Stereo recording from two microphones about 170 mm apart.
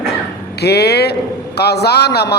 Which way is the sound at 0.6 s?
70° left (ahead or behind).